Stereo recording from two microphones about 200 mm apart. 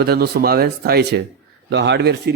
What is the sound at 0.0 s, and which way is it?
Speech, 50° right (ahead or behind).